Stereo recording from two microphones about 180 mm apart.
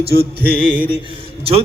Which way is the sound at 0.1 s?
60° right (ahead or behind).